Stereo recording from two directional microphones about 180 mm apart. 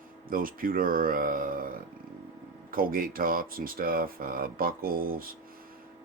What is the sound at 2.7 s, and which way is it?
Speech, 50° right (ahead or behind).